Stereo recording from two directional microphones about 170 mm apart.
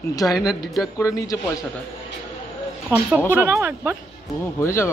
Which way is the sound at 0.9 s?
20° left (ahead or behind).